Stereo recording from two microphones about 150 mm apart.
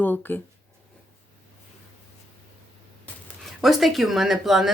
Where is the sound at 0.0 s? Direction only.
10° left (ahead or behind).